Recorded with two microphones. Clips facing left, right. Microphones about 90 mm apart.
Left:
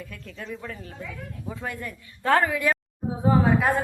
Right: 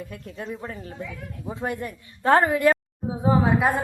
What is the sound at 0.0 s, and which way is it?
Speech, 30° right (ahead or behind).